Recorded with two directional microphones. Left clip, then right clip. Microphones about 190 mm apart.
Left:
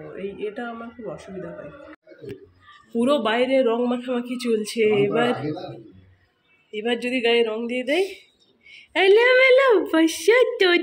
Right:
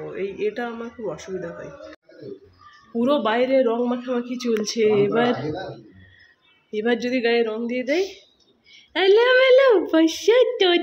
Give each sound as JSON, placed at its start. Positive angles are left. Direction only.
{"t": 0.2, "sound": "speech", "side_deg": -30}
{"t": 3.0, "sound": "a man's voice", "side_deg": -5}
{"t": 6.7, "sound": "a man's voice", "side_deg": -20}